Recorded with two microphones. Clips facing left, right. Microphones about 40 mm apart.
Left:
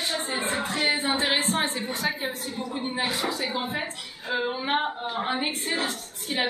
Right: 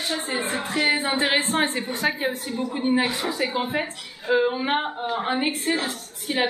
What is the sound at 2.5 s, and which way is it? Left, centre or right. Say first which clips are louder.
Speech: right 7 dB; centre.